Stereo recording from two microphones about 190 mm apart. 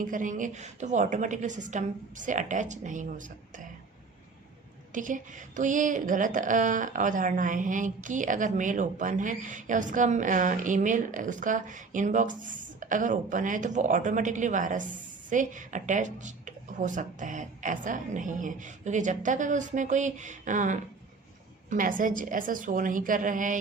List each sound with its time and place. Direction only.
0.0 s a woman's voice: 45° right (ahead or behind)
4.9 s a woman's voice: 45° right (ahead or behind)